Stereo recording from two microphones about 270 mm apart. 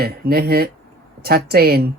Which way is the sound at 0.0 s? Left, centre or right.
Right.